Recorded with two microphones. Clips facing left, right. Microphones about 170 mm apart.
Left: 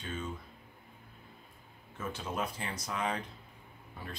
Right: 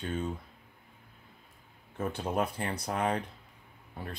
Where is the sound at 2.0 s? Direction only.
60° right (ahead or behind).